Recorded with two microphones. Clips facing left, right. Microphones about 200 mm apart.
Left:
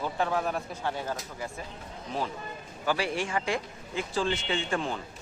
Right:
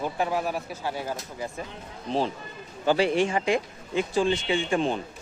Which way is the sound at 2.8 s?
25° right (ahead or behind).